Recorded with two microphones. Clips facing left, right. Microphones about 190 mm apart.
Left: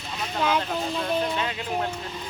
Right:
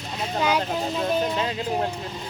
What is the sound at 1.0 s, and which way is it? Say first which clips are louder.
Speech: right 3 dB; 25° right (ahead or behind).